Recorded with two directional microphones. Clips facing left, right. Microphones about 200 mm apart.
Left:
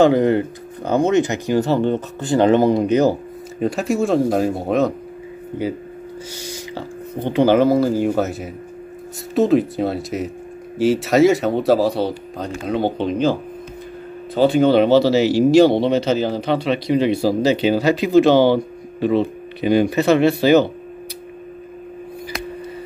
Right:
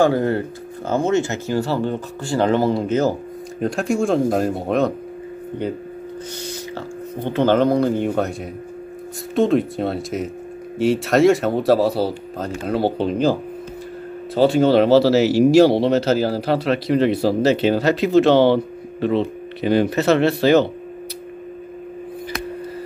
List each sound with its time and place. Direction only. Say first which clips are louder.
0.0 s speech: left 3 dB; 20° left (ahead or behind)
3.5 s speech: left 1 dB; centre (ahead or behind)
7.2 s speech: left 2 dB; 10° left (ahead or behind); by 12.9 s 5° right (ahead or behind)
14.3 s speech: left 1 dB; centre (ahead or behind)
18.6 s a sound: left 1 dB; 5° left (ahead or behind)
19.8 s speech: left 2 dB; centre (ahead or behind)